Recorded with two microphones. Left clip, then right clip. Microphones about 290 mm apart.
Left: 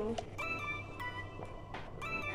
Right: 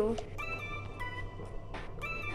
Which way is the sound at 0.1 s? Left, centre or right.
Centre.